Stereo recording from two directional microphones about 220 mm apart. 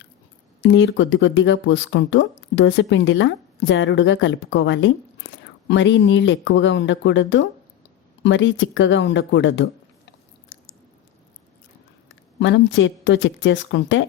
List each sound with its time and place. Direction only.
0.6 s speech: 50° left (ahead or behind)
10.5 s chewing: 60° left (ahead or behind)
12.4 s speech: 55° left (ahead or behind)